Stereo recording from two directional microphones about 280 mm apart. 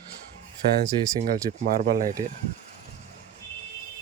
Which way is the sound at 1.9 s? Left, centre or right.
Right.